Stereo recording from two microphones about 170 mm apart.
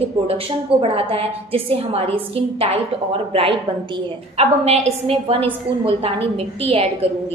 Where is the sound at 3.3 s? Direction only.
35° right (ahead or behind).